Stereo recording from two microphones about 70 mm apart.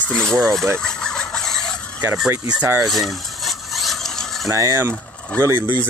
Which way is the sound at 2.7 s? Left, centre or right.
Centre.